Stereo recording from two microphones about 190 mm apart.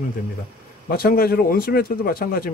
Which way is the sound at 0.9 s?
50° left (ahead or behind).